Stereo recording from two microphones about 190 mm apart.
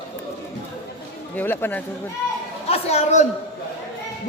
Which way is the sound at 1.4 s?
10° left (ahead or behind).